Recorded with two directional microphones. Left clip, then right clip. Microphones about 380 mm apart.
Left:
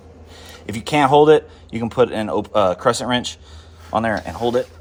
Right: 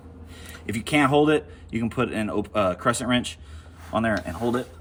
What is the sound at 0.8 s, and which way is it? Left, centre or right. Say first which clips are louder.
Speech: left 8 dB; centre.